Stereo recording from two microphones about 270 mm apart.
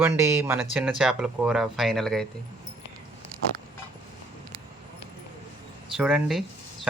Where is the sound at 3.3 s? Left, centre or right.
Centre.